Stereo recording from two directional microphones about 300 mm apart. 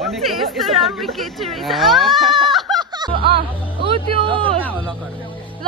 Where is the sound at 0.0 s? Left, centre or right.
Centre.